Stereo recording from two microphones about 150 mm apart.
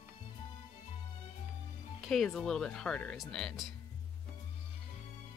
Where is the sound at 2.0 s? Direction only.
Centre (ahead or behind).